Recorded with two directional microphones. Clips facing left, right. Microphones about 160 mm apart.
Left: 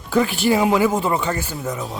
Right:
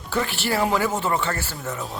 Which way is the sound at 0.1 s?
15° left (ahead or behind).